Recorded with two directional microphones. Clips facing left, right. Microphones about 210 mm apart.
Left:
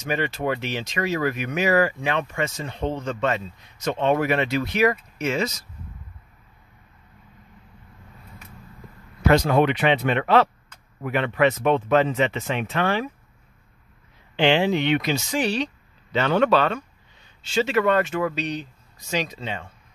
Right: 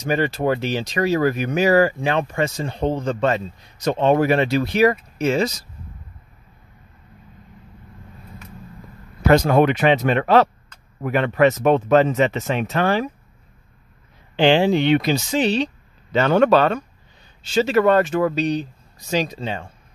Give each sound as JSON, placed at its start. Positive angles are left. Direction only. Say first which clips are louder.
{"t": 0.0, "sound": "speech", "louder": "right 5 dB", "side_deg": -35}
{"t": 9.2, "sound": "speech", "louder": "right 3 dB", "side_deg": -45}
{"t": 14.3, "sound": "speech", "louder": "right 4 dB", "side_deg": -35}
{"t": 15.3, "sound": "speech", "louder": "right 4 dB", "side_deg": -25}
{"t": 16.1, "sound": "speech", "louder": "right 4 dB", "side_deg": -45}